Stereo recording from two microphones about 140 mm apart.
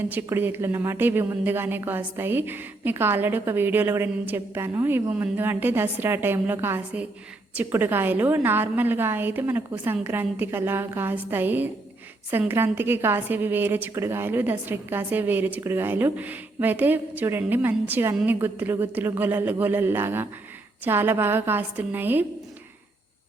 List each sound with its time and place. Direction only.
0.0 s speech: 15° right (ahead or behind)